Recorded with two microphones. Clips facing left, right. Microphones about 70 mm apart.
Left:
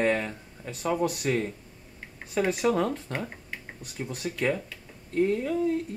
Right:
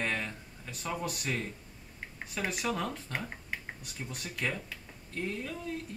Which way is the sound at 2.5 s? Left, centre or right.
Centre.